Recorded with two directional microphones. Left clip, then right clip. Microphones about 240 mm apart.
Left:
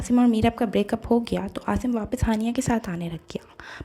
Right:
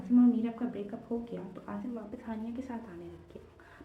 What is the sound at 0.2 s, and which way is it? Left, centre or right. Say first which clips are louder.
A woman's voice: left 8 dB; left.